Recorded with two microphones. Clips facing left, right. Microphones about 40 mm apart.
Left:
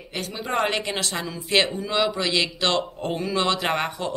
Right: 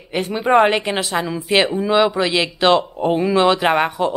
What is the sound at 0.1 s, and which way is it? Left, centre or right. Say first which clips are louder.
Speech: right 12 dB; right.